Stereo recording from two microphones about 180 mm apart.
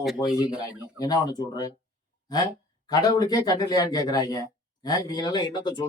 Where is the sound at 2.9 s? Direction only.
20° left (ahead or behind).